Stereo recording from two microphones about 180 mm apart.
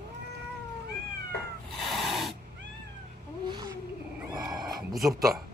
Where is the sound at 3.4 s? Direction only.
25° right (ahead or behind).